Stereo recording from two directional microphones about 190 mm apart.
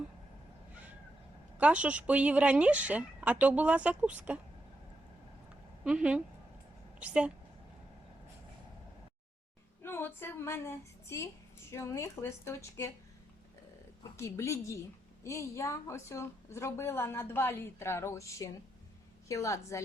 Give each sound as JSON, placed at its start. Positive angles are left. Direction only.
{"t": 1.5, "sound": "speech", "side_deg": -5}
{"t": 5.8, "sound": "speech", "side_deg": -5}
{"t": 9.8, "sound": "a woman's voice", "side_deg": 15}
{"t": 14.2, "sound": "a woman's voice", "side_deg": 15}